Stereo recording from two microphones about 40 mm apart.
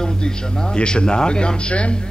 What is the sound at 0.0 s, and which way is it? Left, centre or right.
Speech, centre.